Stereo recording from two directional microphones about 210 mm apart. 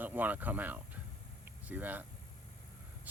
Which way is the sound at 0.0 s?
10° right (ahead or behind).